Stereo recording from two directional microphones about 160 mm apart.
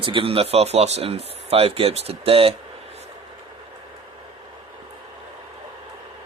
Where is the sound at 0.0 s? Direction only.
30° right (ahead or behind).